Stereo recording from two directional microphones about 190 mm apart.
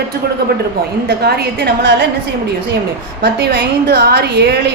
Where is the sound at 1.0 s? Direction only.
55° right (ahead or behind).